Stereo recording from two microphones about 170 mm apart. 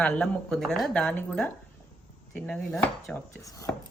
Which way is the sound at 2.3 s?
5° left (ahead or behind).